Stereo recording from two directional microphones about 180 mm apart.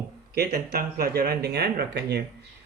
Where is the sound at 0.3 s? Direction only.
65° right (ahead or behind).